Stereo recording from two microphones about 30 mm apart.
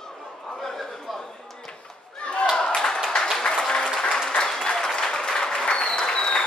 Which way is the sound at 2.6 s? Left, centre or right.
Centre.